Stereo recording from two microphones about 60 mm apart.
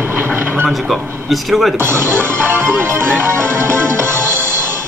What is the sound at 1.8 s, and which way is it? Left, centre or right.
Music, right.